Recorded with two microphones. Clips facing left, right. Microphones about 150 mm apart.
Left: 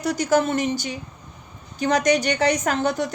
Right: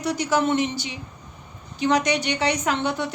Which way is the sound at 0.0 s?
45° left (ahead or behind).